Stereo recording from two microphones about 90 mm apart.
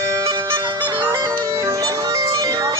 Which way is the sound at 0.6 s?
55° right (ahead or behind).